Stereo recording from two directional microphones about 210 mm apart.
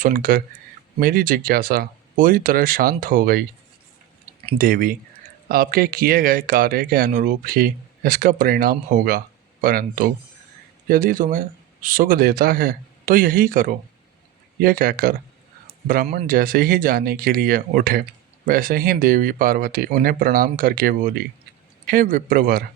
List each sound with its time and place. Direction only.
0.0 s speech: 40° right (ahead or behind)
4.5 s speech: 40° right (ahead or behind)
16.1 s speech: 45° right (ahead or behind)